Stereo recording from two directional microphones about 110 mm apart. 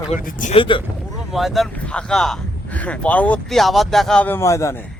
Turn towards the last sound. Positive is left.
turn(degrees=25)  # may be behind; listen again after turning